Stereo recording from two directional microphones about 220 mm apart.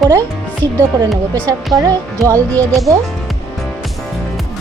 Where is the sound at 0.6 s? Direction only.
15° right (ahead or behind).